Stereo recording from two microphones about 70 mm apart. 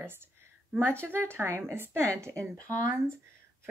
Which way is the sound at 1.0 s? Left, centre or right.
Right.